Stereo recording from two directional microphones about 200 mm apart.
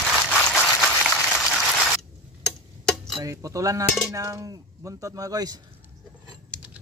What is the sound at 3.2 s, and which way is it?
Speech, 15° right (ahead or behind).